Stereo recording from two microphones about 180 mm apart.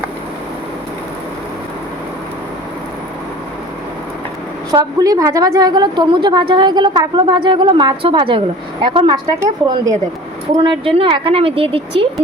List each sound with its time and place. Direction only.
4.7 s a woman's voice: 20° right (ahead or behind)
10.6 s speech: 30° right (ahead or behind)